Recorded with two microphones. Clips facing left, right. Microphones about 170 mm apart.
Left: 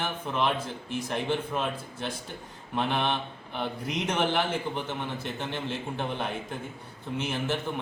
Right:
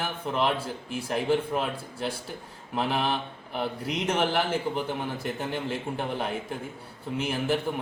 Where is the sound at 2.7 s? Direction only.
5° right (ahead or behind).